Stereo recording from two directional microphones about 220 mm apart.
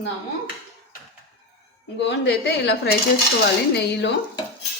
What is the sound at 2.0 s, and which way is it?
Speech, 55° left (ahead or behind).